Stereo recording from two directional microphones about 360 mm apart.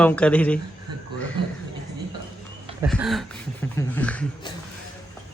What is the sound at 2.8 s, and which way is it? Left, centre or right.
Speech, centre.